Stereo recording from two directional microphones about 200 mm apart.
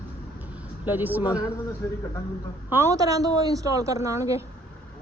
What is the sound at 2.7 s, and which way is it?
A woman's voice, 15° right (ahead or behind).